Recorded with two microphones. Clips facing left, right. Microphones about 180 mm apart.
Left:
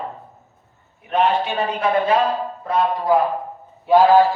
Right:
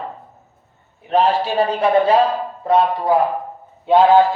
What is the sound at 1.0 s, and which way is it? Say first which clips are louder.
A man's voice: right 2 dB; 30° right (ahead or behind).